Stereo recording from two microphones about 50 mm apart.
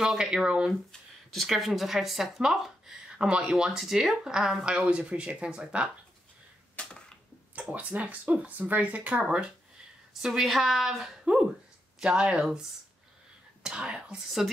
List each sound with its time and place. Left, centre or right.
0.0 s speech: centre
1.3 s speech: centre
4.6 s speech: right
6.8 s a sound: left
7.7 s speech: right
10.2 s speech: centre
12.0 s speech: centre
13.6 s speech: centre